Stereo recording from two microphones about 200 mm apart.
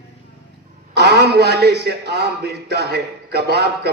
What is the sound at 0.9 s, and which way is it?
A man's voice, 55° right (ahead or behind).